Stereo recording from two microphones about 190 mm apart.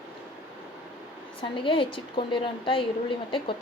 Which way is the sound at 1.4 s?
25° left (ahead or behind).